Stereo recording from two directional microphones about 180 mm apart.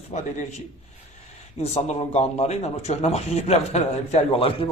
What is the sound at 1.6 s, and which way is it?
A man's voice, 35° left (ahead or behind).